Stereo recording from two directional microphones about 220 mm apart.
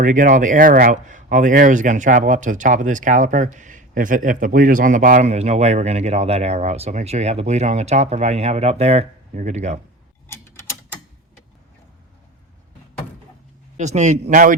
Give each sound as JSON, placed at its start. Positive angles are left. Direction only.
{"t": 0.0, "sound": "speech", "side_deg": -35}
{"t": 10.2, "sound": "a sound", "side_deg": 10}
{"t": 13.7, "sound": "speech", "side_deg": -30}